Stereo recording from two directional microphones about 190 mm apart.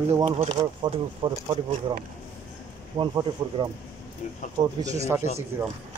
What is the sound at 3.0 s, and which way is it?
Speech, 25° right (ahead or behind).